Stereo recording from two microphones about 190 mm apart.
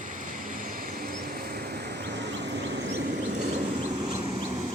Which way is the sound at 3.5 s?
40° right (ahead or behind).